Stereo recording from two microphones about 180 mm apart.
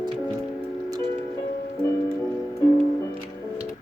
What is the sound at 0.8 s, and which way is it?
Music, 25° right (ahead or behind).